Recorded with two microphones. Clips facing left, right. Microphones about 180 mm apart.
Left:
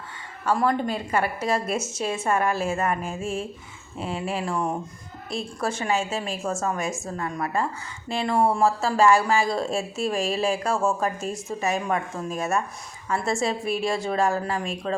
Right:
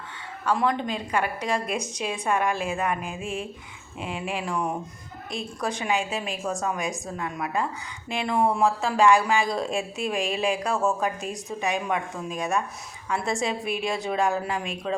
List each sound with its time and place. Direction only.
0.4 s a woman's voice: 5° left (ahead or behind)
3.0 s a sound: 40° left (ahead or behind)
4.4 s a woman's voice: 5° left (ahead or behind)